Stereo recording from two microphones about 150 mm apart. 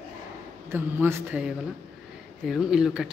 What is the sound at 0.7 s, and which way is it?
Speech, 15° right (ahead or behind).